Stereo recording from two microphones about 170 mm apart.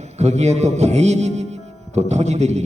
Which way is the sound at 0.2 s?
40° right (ahead or behind).